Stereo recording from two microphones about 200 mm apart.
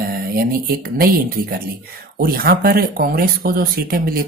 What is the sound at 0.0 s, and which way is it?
Speech, 50° right (ahead or behind).